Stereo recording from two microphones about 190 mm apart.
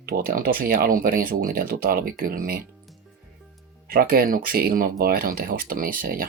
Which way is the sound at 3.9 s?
50° right (ahead or behind).